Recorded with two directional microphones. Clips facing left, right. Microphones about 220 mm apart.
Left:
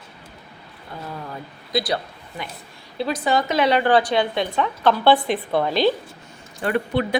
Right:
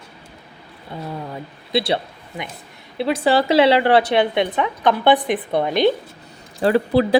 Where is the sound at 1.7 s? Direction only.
25° right (ahead or behind).